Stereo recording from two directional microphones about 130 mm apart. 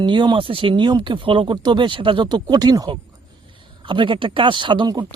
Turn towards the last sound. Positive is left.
turn(degrees=-35)  # may be behind; listen again after turning